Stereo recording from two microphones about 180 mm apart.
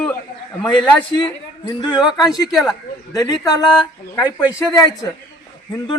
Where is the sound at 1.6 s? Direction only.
25° left (ahead or behind).